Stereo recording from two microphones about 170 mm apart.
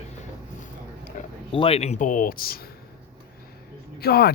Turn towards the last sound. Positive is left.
turn(degrees=70)  # may be behind; listen again after turning